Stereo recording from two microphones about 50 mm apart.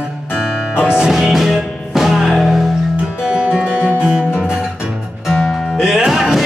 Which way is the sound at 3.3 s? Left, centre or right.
Centre.